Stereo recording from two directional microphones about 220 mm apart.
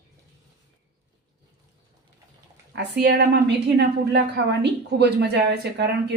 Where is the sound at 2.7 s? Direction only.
50° right (ahead or behind).